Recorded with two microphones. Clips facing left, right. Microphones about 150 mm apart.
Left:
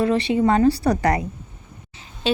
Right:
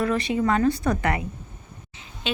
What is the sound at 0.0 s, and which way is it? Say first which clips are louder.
A woman's voice: left 4 dB; 30° left (ahead or behind).